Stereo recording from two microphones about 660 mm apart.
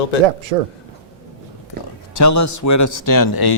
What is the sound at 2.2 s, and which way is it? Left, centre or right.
A man's voice, left.